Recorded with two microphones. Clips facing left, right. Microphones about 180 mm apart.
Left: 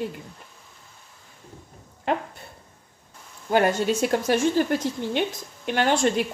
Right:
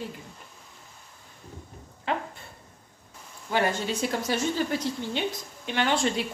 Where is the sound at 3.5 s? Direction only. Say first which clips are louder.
Left 6 dB; 50° left (ahead or behind).